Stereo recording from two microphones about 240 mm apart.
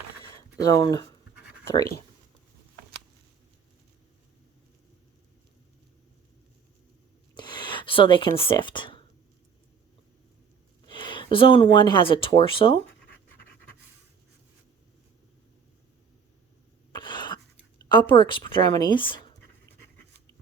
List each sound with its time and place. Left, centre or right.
0.6 s speech: centre
7.3 s a sound: centre
10.8 s speech: centre
17.0 s cough: centre
17.8 s speech: centre